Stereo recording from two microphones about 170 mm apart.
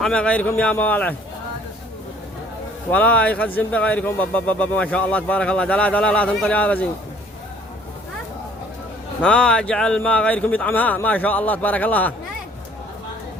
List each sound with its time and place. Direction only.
0.0 s speech: 5° left (ahead or behind)
2.9 s speech: 10° left (ahead or behind)
9.2 s speech: 5° left (ahead or behind)